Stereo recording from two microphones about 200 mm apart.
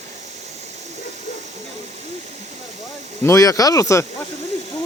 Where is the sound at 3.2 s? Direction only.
15° left (ahead or behind).